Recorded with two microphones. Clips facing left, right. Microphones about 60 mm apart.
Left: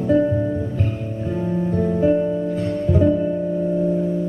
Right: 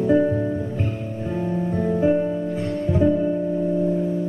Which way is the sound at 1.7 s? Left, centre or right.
Centre.